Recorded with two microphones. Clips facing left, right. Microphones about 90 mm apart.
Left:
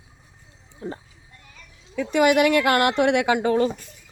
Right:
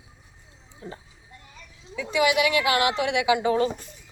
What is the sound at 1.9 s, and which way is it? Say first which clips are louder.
Speech: left 4 dB; 50° left (ahead or behind).